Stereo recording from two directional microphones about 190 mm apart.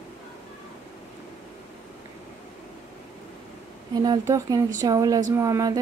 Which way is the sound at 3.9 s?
20° right (ahead or behind).